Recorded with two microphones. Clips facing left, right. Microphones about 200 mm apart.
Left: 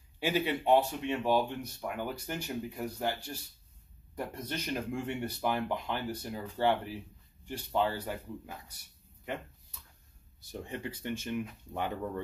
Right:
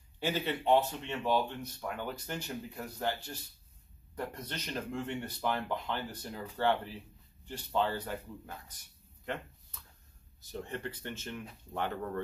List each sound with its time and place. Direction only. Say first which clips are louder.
0.2 s speech: left 3 dB; 10° left (ahead or behind)
9.2 s a sound: even; 10° left (ahead or behind)
10.4 s speech: even; 10° left (ahead or behind)